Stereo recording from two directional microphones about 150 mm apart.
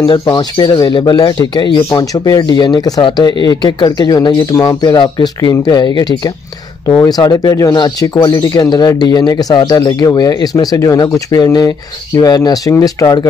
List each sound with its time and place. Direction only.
0.0 s speech: 30° left (ahead or behind)